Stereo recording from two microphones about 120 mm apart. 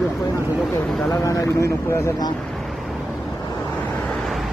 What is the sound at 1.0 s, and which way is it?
Speech, 25° left (ahead or behind).